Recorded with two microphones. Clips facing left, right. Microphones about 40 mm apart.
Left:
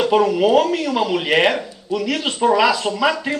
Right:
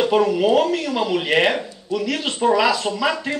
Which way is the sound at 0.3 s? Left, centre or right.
Centre.